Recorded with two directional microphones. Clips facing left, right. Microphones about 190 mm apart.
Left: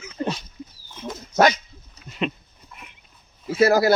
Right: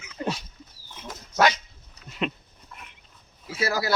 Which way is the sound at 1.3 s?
45° left (ahead or behind).